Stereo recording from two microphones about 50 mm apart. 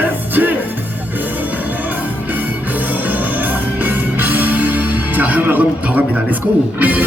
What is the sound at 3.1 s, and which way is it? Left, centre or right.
Music, right.